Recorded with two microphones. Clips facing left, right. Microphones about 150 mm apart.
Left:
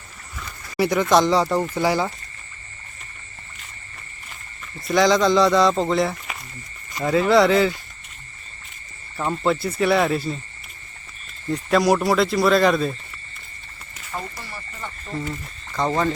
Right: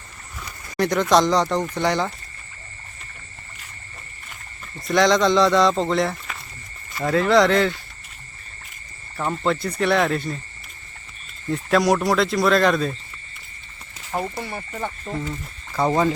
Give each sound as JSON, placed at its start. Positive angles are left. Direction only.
{"t": 0.8, "sound": "speech", "side_deg": 5}
{"t": 4.9, "sound": "speech", "side_deg": 0}
{"t": 9.1, "sound": "speech", "side_deg": 5}
{"t": 11.4, "sound": "speech", "side_deg": 0}
{"t": 14.2, "sound": "speech", "side_deg": -60}
{"t": 15.7, "sound": "speech", "side_deg": -10}